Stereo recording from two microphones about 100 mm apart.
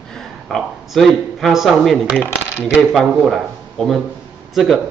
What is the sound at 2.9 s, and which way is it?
Speech, centre (ahead or behind).